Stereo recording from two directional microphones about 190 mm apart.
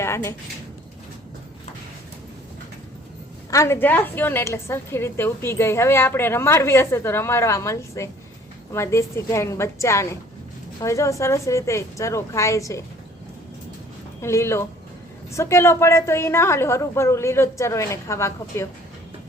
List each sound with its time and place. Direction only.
0.0 s a sound: 15° left (ahead or behind)
3.5 s a woman's voice: 15° left (ahead or behind)
14.2 s a woman's voice: 15° left (ahead or behind)